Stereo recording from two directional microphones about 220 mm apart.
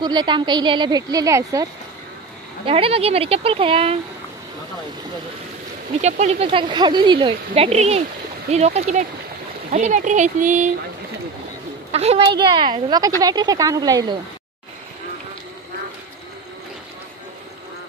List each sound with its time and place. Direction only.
0.0 s speech: 20° right (ahead or behind)
2.6 s speech: 25° right (ahead or behind)
5.9 s speech: 30° right (ahead or behind)
11.9 s a woman's voice: 30° right (ahead or behind)